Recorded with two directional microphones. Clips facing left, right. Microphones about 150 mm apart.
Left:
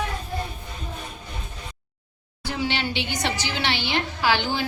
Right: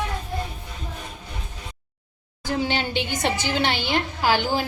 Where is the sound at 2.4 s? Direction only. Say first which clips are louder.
Right 2 dB; 45° right (ahead or behind).